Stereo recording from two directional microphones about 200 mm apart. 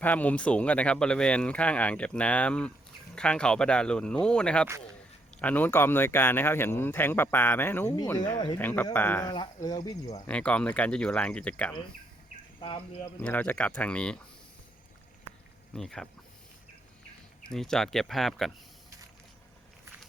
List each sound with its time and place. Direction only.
0.0 s speech: 10° left (ahead or behind)
9.3 s speech: 20° left (ahead or behind)
10.2 s speech: 5° left (ahead or behind)
12.5 s speech: 25° left (ahead or behind)
13.1 s speech: 10° left (ahead or behind)
15.7 s speech: 5° left (ahead or behind)
17.5 s speech: centre (ahead or behind)